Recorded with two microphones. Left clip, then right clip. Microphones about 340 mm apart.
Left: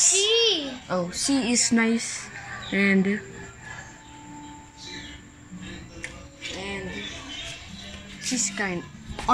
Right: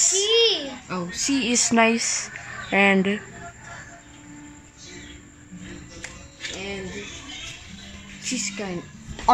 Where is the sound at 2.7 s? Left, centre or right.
Right.